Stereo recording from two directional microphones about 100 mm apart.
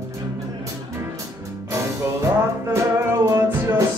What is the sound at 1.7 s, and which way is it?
Music, 30° right (ahead or behind).